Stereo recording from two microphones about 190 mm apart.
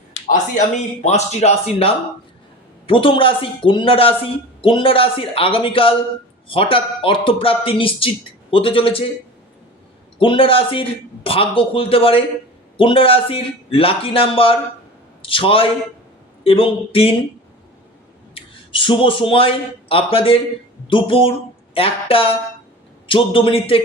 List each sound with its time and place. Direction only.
0.1 s a sound: 40° left (ahead or behind)
1.0 s speech: 35° left (ahead or behind)
10.2 s speech: 30° left (ahead or behind)
18.3 s speech: 25° left (ahead or behind)